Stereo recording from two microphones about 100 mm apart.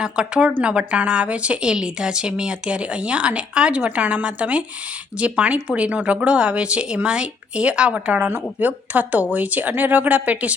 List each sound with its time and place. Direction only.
0.0 s a woman's voice: 10° right (ahead or behind)